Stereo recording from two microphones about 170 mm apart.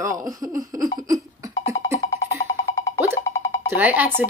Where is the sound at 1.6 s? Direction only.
30° left (ahead or behind).